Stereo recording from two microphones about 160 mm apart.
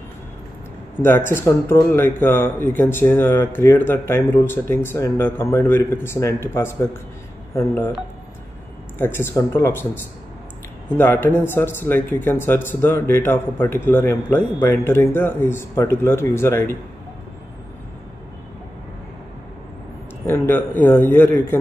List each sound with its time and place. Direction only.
1.0 s speech: 15° left (ahead or behind)
8.9 s speech: 15° left (ahead or behind)
11.0 s speech: 15° left (ahead or behind)
20.2 s speech: 15° left (ahead or behind)